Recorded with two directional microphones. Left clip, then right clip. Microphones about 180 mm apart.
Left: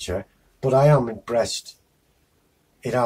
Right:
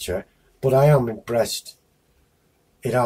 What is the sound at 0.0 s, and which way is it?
Speech, 25° right (ahead or behind).